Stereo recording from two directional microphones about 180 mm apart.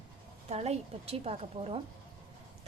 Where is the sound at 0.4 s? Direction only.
35° right (ahead or behind).